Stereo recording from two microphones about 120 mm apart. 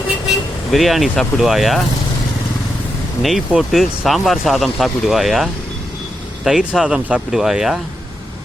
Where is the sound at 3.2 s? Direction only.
5° right (ahead or behind).